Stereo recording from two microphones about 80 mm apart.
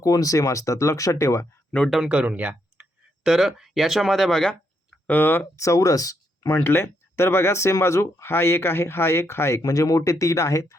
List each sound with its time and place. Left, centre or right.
0.0 s speech: left
2.0 s speech: centre
3.2 s speech: centre
5.0 s speech: left
5.5 s speech: left